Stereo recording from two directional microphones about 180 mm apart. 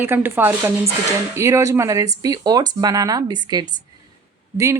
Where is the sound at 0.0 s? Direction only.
10° right (ahead or behind).